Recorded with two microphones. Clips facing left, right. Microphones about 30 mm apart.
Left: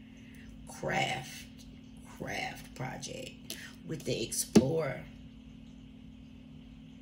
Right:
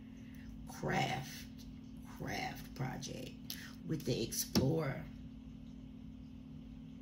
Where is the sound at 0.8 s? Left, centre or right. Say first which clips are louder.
Left 4 dB; left.